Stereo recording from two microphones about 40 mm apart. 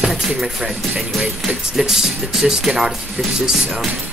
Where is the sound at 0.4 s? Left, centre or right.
Centre.